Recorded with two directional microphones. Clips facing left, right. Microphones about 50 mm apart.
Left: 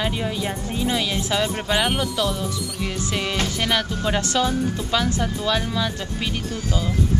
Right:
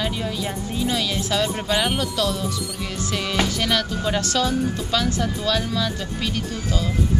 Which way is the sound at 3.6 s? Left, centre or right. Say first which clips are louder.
Even; centre.